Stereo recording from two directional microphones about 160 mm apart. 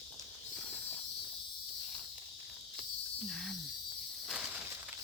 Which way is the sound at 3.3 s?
Centre (ahead or behind).